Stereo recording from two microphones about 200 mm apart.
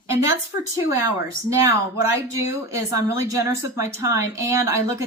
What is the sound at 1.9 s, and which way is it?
A woman's voice, 15° right (ahead or behind).